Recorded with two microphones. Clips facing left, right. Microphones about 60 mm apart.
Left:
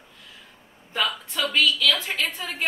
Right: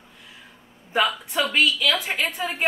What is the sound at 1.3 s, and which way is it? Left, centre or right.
A woman's voice, right.